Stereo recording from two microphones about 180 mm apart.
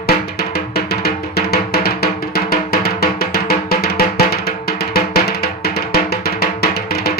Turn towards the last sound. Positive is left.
turn(degrees=60)  # may be behind; listen again after turning